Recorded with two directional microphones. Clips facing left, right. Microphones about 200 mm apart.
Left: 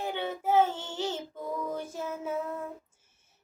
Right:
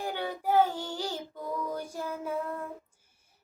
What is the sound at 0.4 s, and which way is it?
Child singing, 25° left (ahead or behind).